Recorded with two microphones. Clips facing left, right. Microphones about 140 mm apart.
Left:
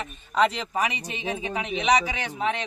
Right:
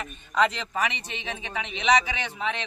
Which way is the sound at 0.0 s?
30° left (ahead or behind).